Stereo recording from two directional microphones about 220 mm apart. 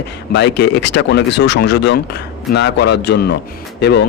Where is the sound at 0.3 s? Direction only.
50° left (ahead or behind).